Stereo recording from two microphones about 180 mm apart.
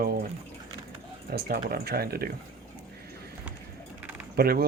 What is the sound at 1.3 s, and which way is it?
Speech, 55° right (ahead or behind).